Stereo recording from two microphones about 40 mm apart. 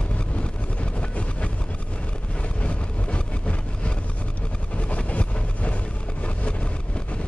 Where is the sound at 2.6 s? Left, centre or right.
Left.